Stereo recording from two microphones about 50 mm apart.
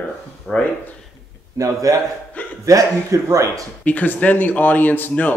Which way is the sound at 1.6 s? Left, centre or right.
Right.